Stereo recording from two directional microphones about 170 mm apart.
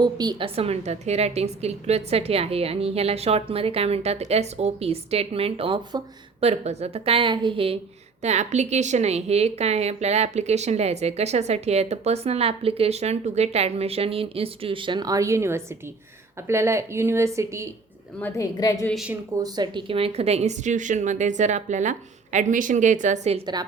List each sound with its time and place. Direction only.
0.0 s a woman's voice: 25° right (ahead or behind)
18.2 s a woman's voice: 15° left (ahead or behind)
18.9 s a woman's voice: centre (ahead or behind)
19.4 s a woman's voice: 25° right (ahead or behind); by 23.4 s 40° right (ahead or behind)